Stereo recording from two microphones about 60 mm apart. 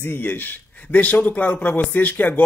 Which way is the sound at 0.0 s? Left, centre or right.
Left.